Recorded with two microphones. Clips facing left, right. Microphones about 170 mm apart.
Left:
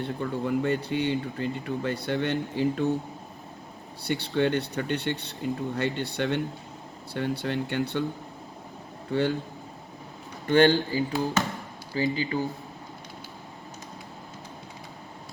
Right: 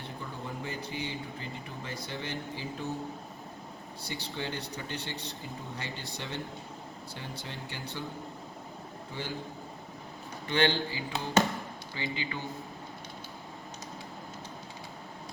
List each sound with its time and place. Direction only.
0.0 s speech: 65° left (ahead or behind)
4.0 s speech: 65° left (ahead or behind)
9.1 s speech: 65° left (ahead or behind)
10.4 s speech: 45° left (ahead or behind)